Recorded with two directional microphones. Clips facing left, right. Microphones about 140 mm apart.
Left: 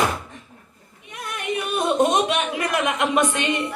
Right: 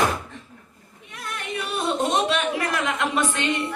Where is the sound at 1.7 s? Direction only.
20° left (ahead or behind).